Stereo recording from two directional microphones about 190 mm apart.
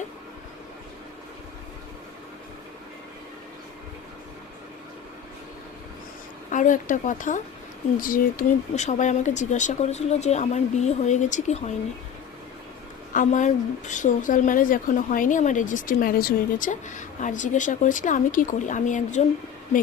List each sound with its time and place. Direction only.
6.5 s speech: 40° left (ahead or behind)
13.1 s a woman's voice: 40° left (ahead or behind)